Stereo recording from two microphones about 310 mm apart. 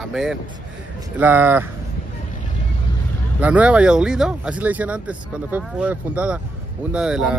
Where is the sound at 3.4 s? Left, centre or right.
Centre.